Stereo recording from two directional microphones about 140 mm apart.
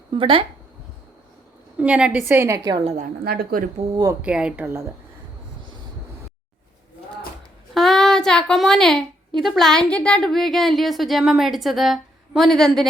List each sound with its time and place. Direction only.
0.1 s speech: 40° right (ahead or behind)
1.8 s a woman's voice: 10° right (ahead or behind)
2.7 s a woman's voice: 50° right (ahead or behind)
3.2 s speech: 90° right
3.9 s speech: 25° right (ahead or behind)
4.2 s a woman's voice: 5° right (ahead or behind)
7.7 s a woman's voice: centre (ahead or behind)